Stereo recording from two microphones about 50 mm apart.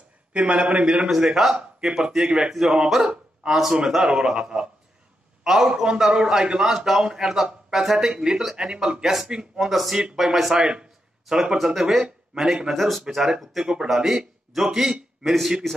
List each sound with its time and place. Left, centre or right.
0.3 s a man's voice: right
9.7 s speech: centre
12.7 s speech: centre